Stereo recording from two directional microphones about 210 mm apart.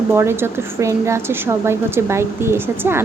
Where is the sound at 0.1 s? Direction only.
10° right (ahead or behind).